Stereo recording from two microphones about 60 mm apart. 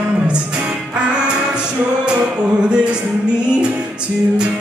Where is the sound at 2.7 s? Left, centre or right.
Centre.